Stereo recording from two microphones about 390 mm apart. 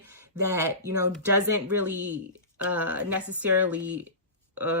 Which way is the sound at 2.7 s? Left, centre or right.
Centre.